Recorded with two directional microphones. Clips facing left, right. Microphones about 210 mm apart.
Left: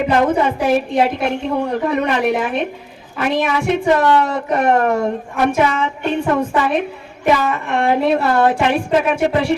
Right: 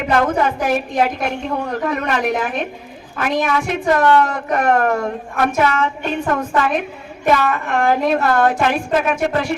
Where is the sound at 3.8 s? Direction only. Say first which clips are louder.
Right 1 dB; 15° left (ahead or behind).